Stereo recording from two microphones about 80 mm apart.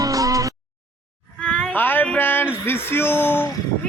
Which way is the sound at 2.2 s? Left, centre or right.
Left.